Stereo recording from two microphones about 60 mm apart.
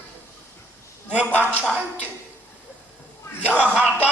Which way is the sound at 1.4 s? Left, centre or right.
Right.